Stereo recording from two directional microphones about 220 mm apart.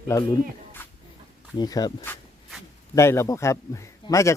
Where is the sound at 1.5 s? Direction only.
15° left (ahead or behind).